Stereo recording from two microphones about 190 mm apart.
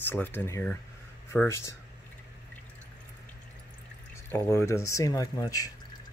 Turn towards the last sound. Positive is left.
turn(degrees=20)  # may be behind; listen again after turning